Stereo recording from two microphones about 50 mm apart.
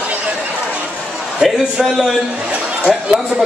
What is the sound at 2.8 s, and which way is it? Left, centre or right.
Speech, centre.